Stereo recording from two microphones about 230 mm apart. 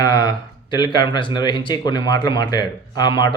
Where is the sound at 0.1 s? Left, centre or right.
Centre.